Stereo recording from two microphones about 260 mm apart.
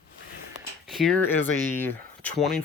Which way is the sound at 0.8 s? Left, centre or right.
Centre.